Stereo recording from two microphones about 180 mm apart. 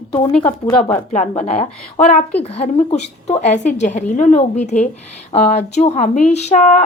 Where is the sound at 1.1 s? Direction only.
40° left (ahead or behind).